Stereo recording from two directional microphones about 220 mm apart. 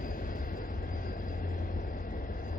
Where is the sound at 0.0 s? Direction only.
40° left (ahead or behind).